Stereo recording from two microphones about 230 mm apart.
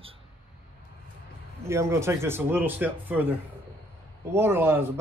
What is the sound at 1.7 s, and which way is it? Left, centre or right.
Speech, centre.